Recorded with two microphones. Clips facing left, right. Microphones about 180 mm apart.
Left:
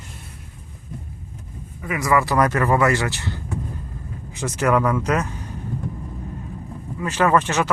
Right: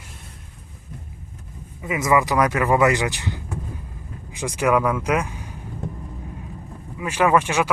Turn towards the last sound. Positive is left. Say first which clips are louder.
# even
turn(degrees=-10)  # may be behind; listen again after turning